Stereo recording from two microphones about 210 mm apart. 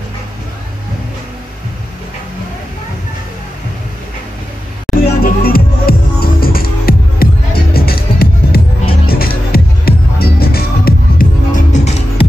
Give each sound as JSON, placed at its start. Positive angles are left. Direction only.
{"t": 5.2, "sound": "music", "side_deg": 45}